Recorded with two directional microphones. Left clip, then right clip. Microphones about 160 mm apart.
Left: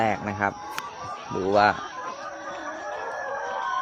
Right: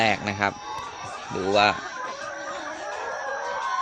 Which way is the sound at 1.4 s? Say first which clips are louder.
Even; 10° left (ahead or behind).